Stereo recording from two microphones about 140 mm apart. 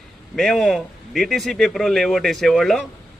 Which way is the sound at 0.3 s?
Centre (ahead or behind).